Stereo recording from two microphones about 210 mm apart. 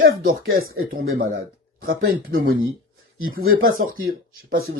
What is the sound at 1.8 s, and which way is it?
Speech, 45° right (ahead or behind).